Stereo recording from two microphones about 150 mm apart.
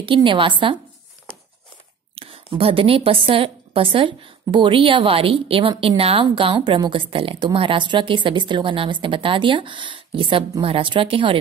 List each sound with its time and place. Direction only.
0.0 s a woman's voice: 35° right (ahead or behind)
2.1 s a woman's voice: 40° right (ahead or behind)